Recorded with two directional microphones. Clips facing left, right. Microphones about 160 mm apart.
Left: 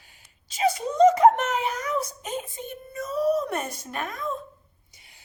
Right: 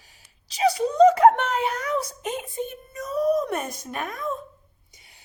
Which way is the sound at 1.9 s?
30° right (ahead or behind).